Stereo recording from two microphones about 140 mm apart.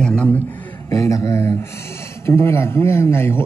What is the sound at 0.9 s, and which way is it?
A man's voice, 20° left (ahead or behind).